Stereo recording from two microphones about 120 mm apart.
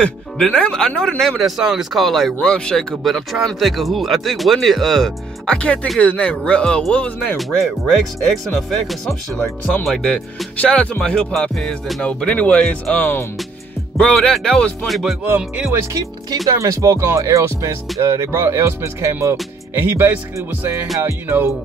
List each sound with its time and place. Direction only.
0.0 s music: 10° left (ahead or behind)
1.4 s speech: 5° right (ahead or behind)
9.8 s music: 10° left (ahead or behind)
15.2 s speech: 15° right (ahead or behind)
15.7 s speech: 25° right (ahead or behind)